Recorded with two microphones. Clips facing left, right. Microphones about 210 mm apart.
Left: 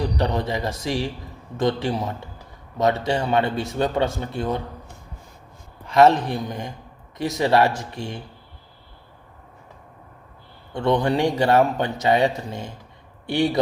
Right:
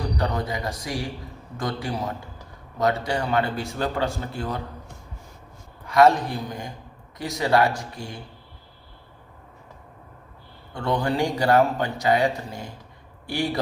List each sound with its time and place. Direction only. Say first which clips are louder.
0.2 s speech: left 3 dB; 25° left (ahead or behind)
5.9 s speech: left 2 dB; 25° left (ahead or behind)
10.8 s speech: left 4 dB; 20° left (ahead or behind)